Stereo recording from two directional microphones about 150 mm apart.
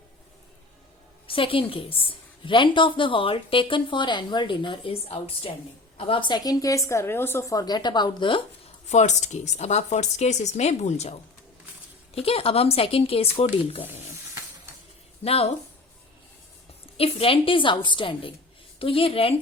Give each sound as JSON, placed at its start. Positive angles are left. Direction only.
{"t": 1.3, "sound": "a woman's voice", "side_deg": 35}
{"t": 8.9, "sound": "a woman's voice", "side_deg": 50}
{"t": 15.2, "sound": "speech", "side_deg": 40}
{"t": 17.0, "sound": "a woman's voice", "side_deg": 40}